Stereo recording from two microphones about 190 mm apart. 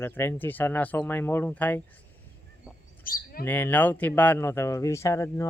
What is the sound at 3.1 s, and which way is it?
Speech, 50° left (ahead or behind).